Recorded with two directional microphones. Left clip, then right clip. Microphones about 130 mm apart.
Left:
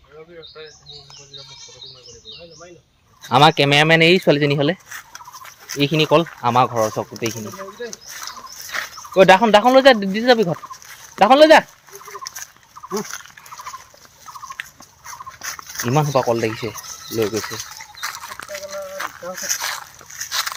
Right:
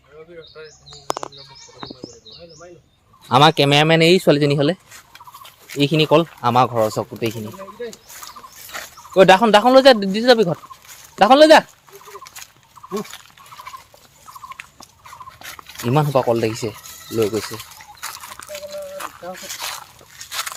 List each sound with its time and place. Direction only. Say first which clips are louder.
3.2 s speech: even; 30° right (ahead or behind)
5.8 s speech: right 1 dB; 35° right (ahead or behind)
7.2 s speech: right 1 dB; 25° right (ahead or behind)
8.7 s a sound: left 6 dB; 30° left (ahead or behind)
9.1 s speech: even; 25° right (ahead or behind)
12.9 s speech: left 1 dB; 5° left (ahead or behind)
15.4 s a sound: left 6 dB; 5° left (ahead or behind)
15.9 s speech: right 1 dB; 30° right (ahead or behind)
17.2 s speech: right 1 dB; 5° left (ahead or behind)
18.0 s a sound: left 4 dB; 10° right (ahead or behind)
18.5 s a sound: left 1 dB; 15° left (ahead or behind)
20.4 s dog: left 3 dB; 10° left (ahead or behind)